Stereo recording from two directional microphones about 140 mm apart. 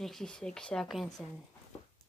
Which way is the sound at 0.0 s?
5° left (ahead or behind).